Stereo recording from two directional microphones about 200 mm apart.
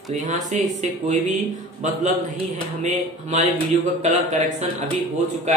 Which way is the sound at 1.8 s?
35° right (ahead or behind).